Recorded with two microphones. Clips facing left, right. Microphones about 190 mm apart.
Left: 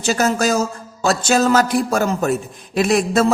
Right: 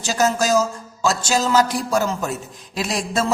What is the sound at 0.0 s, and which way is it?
Speech, 60° left (ahead or behind).